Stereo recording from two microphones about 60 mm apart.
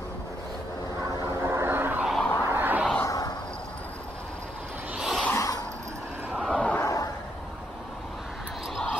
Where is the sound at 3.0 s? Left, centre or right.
Left.